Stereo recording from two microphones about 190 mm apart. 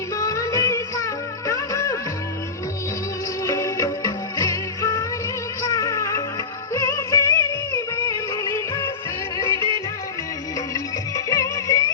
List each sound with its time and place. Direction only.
0.2 s music: 15° left (ahead or behind)
3.4 s music: 15° left (ahead or behind)
10.8 s music: 20° left (ahead or behind)